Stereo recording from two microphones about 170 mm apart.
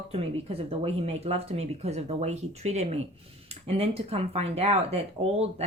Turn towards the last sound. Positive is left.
turn(degrees=-35)  # may be behind; listen again after turning